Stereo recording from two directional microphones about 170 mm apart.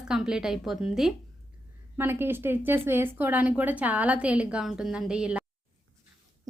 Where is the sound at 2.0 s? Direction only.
15° right (ahead or behind).